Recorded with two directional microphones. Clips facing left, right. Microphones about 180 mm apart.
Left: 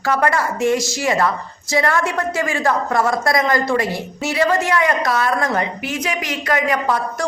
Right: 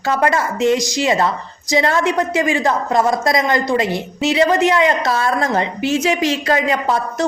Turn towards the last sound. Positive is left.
turn(degrees=-25)  # may be behind; listen again after turning